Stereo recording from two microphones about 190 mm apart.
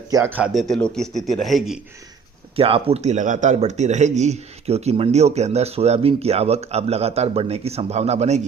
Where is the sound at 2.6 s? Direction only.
30° right (ahead or behind).